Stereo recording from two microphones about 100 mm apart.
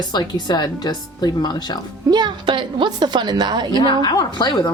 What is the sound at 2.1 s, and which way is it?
Speech, 50° right (ahead or behind).